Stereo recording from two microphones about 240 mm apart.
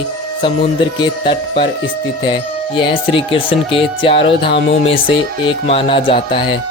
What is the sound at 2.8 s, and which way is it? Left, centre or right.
Speech, left.